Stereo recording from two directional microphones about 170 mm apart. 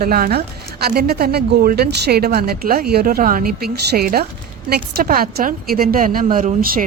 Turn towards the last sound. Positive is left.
turn(degrees=-55)  # may be behind; listen again after turning